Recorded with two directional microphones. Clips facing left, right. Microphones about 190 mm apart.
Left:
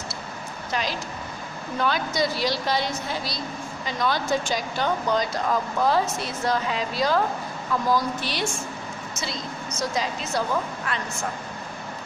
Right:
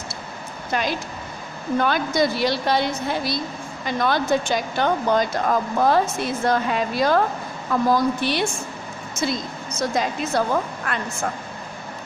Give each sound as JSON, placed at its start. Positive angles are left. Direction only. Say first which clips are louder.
{"t": 0.7, "sound": "a woman's voice", "louder": "right 4 dB", "side_deg": -55}